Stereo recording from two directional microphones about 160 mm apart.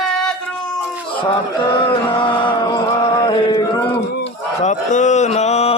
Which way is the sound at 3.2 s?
25° left (ahead or behind).